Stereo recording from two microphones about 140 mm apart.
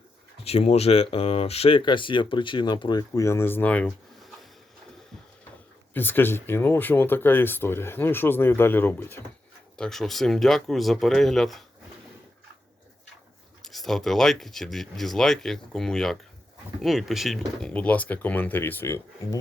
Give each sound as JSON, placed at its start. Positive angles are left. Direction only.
{"t": 0.4, "sound": "speech", "side_deg": 45}
{"t": 3.2, "sound": "speech", "side_deg": 20}
{"t": 5.9, "sound": "speech", "side_deg": 15}
{"t": 13.7, "sound": "speech", "side_deg": 0}